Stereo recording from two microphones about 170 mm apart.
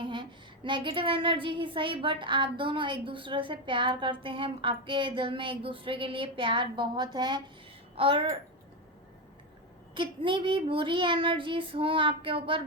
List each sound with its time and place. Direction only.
0.0 s a woman's voice: 30° right (ahead or behind)
9.9 s a woman's voice: 30° right (ahead or behind)